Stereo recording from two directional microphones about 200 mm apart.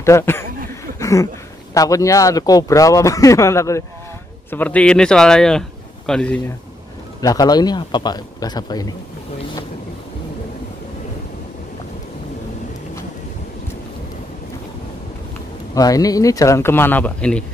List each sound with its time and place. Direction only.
0.0 s speech: 15° left (ahead or behind)
7.2 s a man's voice: 20° left (ahead or behind)
15.7 s speech: 15° left (ahead or behind)